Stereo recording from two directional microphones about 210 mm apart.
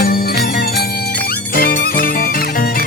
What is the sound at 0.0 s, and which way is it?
Music, 45° left (ahead or behind).